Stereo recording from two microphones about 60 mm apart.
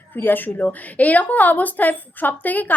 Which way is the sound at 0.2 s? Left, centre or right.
Left.